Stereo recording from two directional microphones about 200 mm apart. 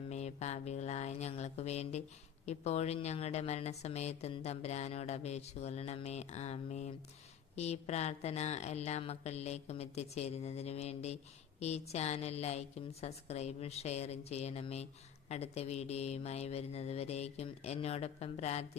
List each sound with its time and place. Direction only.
0.1 s a woman's voice: 35° left (ahead or behind)